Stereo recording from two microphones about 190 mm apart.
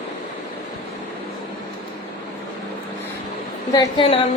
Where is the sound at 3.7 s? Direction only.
25° left (ahead or behind).